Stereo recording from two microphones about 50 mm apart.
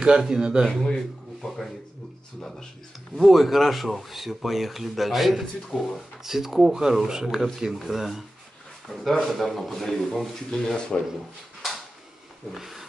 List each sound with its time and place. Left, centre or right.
0.0 s speech: centre
0.8 s speech: centre
3.2 s a man's voice: centre
12.5 s speech: centre